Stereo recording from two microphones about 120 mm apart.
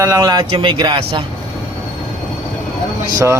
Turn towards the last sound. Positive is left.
turn(degrees=-25)  # may be behind; listen again after turning